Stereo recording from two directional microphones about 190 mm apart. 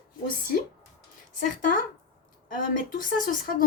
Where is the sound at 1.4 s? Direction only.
45° left (ahead or behind).